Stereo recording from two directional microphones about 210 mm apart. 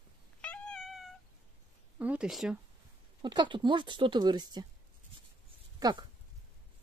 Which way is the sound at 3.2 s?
20° right (ahead or behind).